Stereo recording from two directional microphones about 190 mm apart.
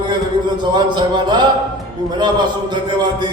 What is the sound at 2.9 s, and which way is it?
Speech, 25° right (ahead or behind).